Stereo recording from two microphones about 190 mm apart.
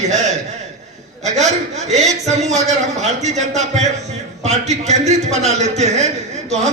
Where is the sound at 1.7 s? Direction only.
35° right (ahead or behind).